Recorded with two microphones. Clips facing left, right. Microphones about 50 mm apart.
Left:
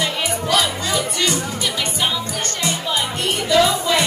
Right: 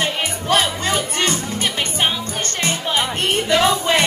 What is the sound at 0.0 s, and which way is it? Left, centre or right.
Speech, right.